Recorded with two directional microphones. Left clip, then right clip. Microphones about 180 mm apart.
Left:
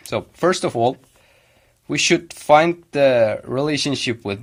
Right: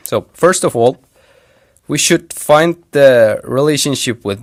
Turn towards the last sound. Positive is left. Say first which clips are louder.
# right 5 dB
turn(degrees=-55)  # may be behind; listen again after turning